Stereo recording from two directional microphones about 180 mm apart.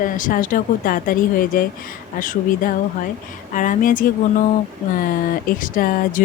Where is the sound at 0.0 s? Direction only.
50° left (ahead or behind).